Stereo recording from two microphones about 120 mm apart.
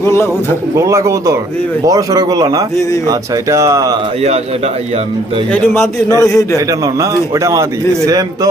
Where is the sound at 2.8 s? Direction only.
25° left (ahead or behind).